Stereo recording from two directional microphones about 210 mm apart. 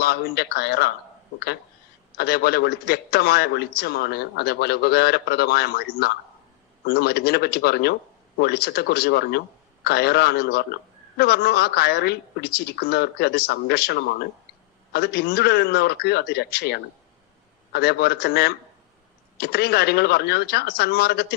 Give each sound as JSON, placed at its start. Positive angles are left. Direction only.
{"t": 0.0, "sound": "a man's voice", "side_deg": 50}
{"t": 2.1, "sound": "a man's voice", "side_deg": 50}